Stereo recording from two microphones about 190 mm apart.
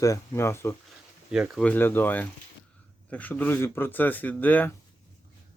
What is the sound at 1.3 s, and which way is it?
Speech, 5° right (ahead or behind).